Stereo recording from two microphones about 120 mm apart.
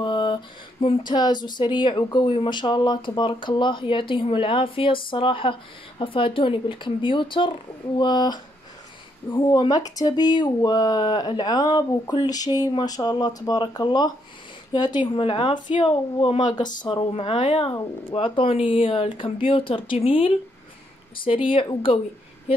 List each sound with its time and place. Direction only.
0.0 s a sound: 40° left (ahead or behind)
1.1 s speech: 35° left (ahead or behind)
17.1 s speech: 50° left (ahead or behind)